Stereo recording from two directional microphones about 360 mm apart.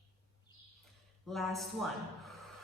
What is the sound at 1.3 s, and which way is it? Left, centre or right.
Speech, centre.